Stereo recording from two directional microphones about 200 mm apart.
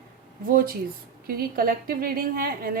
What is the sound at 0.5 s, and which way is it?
A woman's voice, 45° right (ahead or behind).